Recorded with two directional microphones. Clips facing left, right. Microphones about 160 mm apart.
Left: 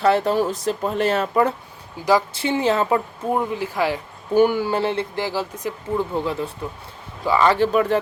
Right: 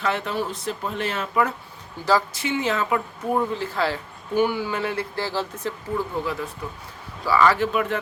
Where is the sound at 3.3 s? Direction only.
10° left (ahead or behind).